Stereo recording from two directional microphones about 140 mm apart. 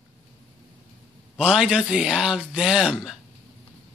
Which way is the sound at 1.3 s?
5° right (ahead or behind).